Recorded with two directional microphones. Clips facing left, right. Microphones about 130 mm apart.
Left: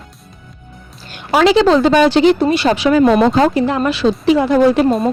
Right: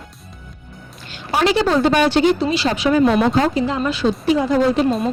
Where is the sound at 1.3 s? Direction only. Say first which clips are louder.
Left 6 dB; 90° left.